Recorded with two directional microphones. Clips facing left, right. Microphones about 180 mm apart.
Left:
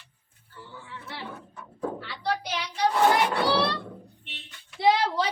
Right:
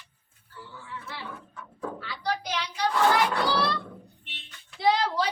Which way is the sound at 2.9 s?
20° left (ahead or behind).